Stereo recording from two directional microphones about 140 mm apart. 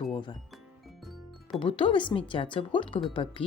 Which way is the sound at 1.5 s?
40° left (ahead or behind).